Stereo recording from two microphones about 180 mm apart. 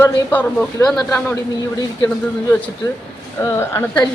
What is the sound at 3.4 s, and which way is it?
Speech, 15° left (ahead or behind).